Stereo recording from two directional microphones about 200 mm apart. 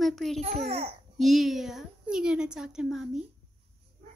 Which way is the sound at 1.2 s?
Centre (ahead or behind).